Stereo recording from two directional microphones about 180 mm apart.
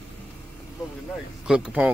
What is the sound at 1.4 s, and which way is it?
Speech, 5° right (ahead or behind).